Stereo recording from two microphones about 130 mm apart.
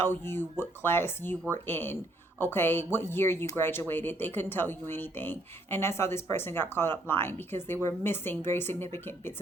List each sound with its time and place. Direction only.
0.0 s speech: 15° left (ahead or behind)